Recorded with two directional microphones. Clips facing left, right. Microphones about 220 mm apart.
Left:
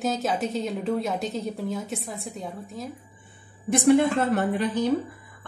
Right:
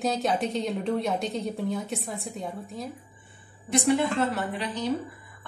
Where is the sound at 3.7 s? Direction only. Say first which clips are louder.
Left 5 dB; 50° left (ahead or behind).